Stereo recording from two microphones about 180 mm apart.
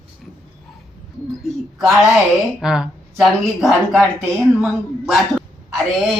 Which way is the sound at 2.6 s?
5° right (ahead or behind).